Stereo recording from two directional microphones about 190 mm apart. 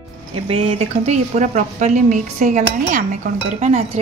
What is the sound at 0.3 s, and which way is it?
A woman's voice, 30° right (ahead or behind).